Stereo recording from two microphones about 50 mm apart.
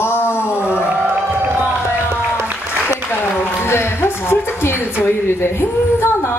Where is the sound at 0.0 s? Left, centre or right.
Left.